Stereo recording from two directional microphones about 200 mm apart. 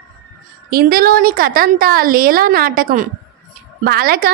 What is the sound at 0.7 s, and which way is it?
A woman's voice, 50° right (ahead or behind).